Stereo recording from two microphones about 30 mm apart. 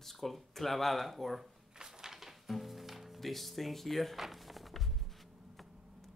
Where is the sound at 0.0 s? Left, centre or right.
Centre.